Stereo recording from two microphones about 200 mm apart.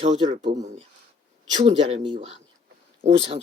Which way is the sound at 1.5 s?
25° right (ahead or behind).